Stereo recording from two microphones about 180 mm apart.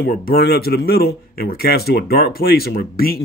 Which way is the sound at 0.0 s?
55° left (ahead or behind).